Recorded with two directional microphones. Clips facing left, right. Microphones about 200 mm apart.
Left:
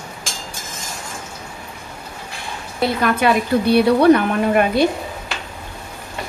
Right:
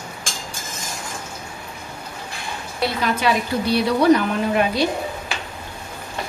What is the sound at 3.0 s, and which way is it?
A woman's voice, 55° left (ahead or behind).